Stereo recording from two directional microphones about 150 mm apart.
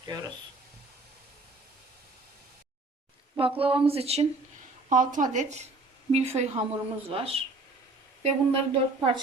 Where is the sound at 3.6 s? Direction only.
40° right (ahead or behind).